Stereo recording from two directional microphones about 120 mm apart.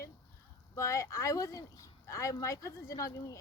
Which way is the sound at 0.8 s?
25° left (ahead or behind).